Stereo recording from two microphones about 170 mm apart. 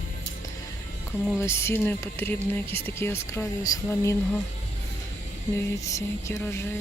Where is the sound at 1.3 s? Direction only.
15° left (ahead or behind).